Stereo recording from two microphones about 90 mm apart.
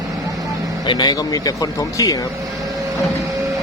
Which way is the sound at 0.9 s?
50° left (ahead or behind).